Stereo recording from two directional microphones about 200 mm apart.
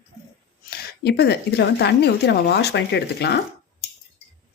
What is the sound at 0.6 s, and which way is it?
Speech, 55° left (ahead or behind).